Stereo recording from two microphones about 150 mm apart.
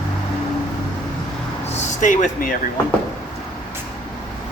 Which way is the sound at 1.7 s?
55° left (ahead or behind).